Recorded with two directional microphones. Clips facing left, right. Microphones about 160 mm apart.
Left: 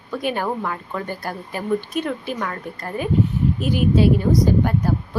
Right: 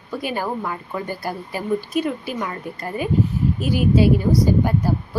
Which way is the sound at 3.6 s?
50° left (ahead or behind).